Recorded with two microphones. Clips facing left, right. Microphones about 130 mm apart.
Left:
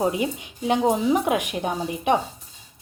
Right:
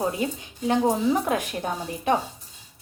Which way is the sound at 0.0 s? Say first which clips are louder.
Left 3 dB; 15° left (ahead or behind).